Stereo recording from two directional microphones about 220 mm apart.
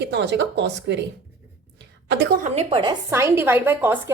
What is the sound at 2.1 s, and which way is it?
Speech, 50° right (ahead or behind).